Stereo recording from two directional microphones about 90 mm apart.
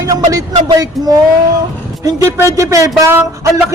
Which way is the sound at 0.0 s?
40° right (ahead or behind).